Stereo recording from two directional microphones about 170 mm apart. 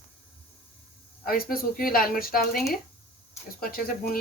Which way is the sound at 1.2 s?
60° left (ahead or behind).